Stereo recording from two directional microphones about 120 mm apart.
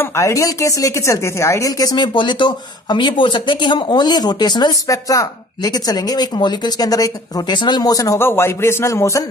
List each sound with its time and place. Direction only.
0.0 s speech: 25° left (ahead or behind)